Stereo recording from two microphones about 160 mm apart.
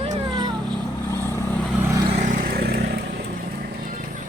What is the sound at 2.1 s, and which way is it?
Vehicle, 55° right (ahead or behind).